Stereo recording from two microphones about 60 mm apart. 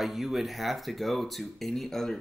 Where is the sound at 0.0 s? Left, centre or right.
Centre.